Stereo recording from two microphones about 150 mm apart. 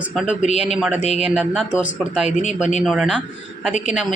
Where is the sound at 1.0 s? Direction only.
45° left (ahead or behind).